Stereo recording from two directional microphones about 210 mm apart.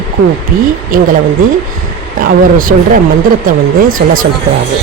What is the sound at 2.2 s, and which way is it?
Speech, 40° right (ahead or behind).